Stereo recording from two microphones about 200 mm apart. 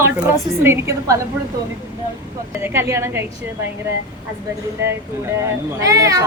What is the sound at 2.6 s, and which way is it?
Speech, 15° right (ahead or behind).